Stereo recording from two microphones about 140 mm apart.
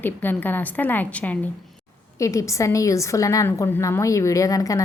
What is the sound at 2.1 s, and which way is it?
A woman's voice, 25° left (ahead or behind).